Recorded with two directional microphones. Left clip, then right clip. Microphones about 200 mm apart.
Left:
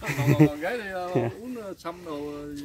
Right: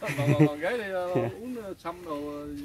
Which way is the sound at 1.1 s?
20° left (ahead or behind).